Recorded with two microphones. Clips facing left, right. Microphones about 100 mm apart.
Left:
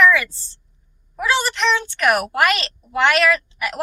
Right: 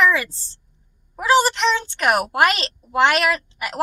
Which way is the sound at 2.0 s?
25° right (ahead or behind).